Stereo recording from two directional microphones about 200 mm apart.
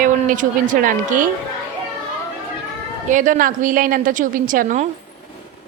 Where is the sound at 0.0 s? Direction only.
40° right (ahead or behind).